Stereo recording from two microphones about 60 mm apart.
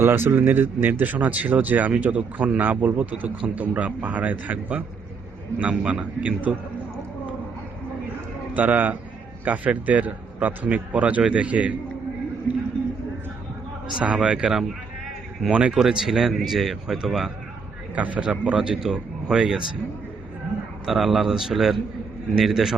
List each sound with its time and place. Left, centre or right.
0.0 s speech: right
8.5 s speech: right
14.0 s a man's voice: centre
17.9 s a man's voice: right; by 19.6 s centre
20.8 s a man's voice: centre